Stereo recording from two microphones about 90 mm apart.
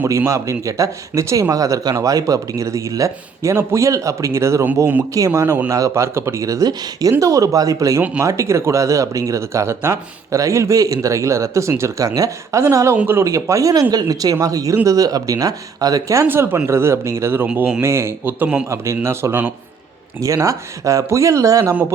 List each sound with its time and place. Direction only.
0.3 s speech: 35° right (ahead or behind)
16.2 s a man's voice: 25° right (ahead or behind)
17.5 s speech: 10° right (ahead or behind)
17.7 s a man's voice: 30° right (ahead or behind)
19.0 s speech: 30° right (ahead or behind)